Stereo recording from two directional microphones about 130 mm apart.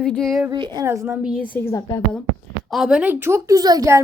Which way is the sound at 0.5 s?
35° right (ahead or behind).